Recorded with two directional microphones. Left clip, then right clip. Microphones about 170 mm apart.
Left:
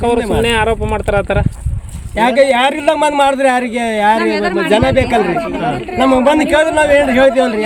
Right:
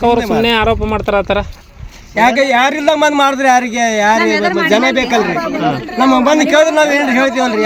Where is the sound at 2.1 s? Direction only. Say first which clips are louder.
Even; centre (ahead or behind).